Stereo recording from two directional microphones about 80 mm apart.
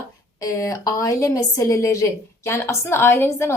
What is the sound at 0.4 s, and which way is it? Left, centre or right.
A woman's voice, left.